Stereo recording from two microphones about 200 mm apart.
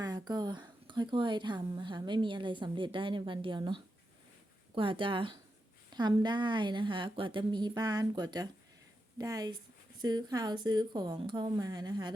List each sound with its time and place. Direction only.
0.0 s speech: 20° right (ahead or behind)